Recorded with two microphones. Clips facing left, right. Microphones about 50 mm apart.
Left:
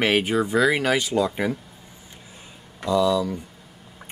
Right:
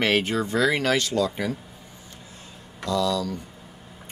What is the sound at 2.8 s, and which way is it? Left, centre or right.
Speech, centre.